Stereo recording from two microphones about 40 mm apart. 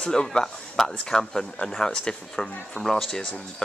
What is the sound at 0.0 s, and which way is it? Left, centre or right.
Speech, centre.